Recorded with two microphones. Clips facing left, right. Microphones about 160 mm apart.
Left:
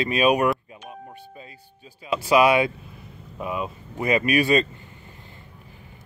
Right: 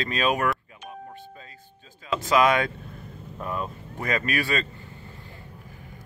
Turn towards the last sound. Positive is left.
turn(degrees=20)  # may be behind; listen again after turning